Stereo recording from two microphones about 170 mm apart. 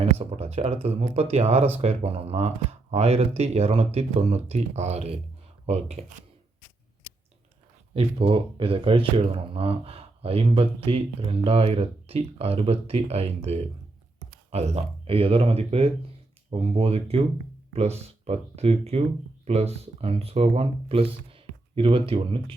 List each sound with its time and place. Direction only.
0.0 s speech: 35° right (ahead or behind)
7.9 s speech: 35° right (ahead or behind)